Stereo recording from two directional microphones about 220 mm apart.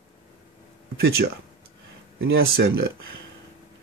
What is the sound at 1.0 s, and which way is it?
Speech, 45° right (ahead or behind).